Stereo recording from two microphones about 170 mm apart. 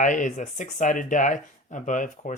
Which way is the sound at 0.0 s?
50° left (ahead or behind).